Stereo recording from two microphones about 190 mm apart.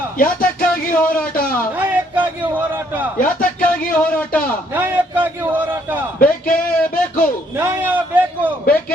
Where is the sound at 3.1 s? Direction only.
45° left (ahead or behind).